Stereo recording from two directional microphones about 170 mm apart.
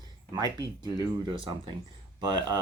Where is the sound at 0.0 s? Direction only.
25° right (ahead or behind).